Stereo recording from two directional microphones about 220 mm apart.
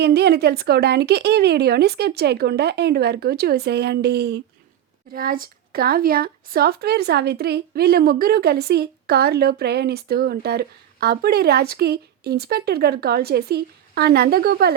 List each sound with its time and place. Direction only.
0.0 s speech: 45° right (ahead or behind)